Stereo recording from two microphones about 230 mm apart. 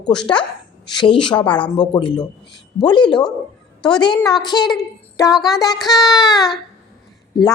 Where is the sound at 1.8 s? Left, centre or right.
Centre.